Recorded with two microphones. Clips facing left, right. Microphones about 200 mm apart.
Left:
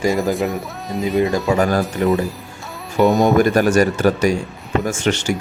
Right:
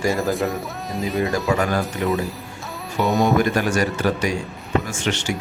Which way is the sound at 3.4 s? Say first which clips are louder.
Left 6 dB; 45° left (ahead or behind).